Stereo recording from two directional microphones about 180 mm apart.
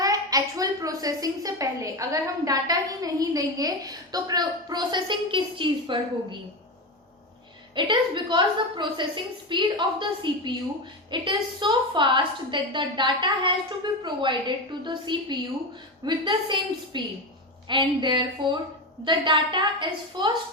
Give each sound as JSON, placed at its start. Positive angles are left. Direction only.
{"t": 0.0, "sound": "a woman's voice", "side_deg": -20}
{"t": 7.8, "sound": "a woman's voice", "side_deg": -25}